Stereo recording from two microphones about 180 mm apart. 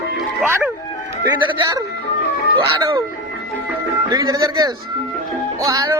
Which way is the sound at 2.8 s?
20° right (ahead or behind).